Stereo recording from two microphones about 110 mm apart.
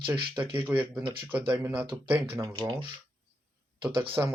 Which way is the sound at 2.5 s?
50° right (ahead or behind).